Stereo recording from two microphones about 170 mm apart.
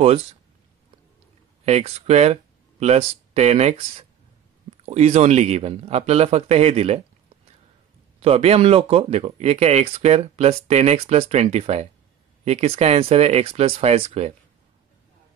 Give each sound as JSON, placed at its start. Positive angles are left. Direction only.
{"t": 1.7, "sound": "speech", "side_deg": -40}
{"t": 4.8, "sound": "speech", "side_deg": -40}
{"t": 8.2, "sound": "speech", "side_deg": -35}